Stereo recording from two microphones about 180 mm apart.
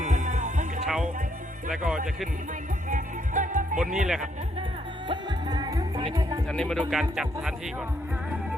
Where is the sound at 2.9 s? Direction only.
45° right (ahead or behind).